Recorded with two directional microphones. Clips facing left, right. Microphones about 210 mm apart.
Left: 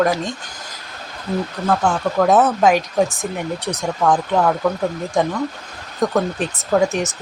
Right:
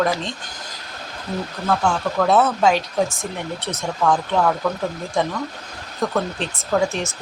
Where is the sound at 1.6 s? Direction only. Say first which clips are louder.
Left 1 dB; 15° left (ahead or behind).